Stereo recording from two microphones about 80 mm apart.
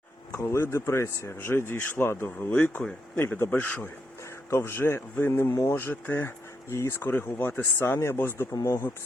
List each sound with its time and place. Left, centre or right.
0.3 s speech: left